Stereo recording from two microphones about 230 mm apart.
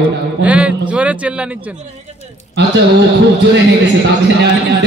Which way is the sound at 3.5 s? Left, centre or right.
Right.